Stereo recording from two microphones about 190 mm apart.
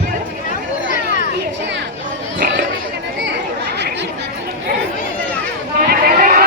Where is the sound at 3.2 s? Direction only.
65° right (ahead or behind).